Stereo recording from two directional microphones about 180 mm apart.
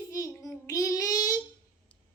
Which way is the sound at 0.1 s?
20° left (ahead or behind).